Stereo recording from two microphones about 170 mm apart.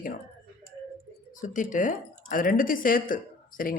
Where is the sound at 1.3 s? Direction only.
50° left (ahead or behind).